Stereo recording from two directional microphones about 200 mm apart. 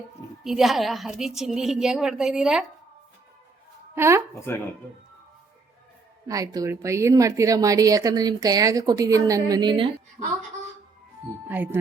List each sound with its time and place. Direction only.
0.4 s a woman's voice: centre (ahead or behind)
3.9 s speech: 15° right (ahead or behind)
4.4 s speech: 15° left (ahead or behind)
6.2 s speech: 15° right (ahead or behind)
11.4 s speech: 10° right (ahead or behind)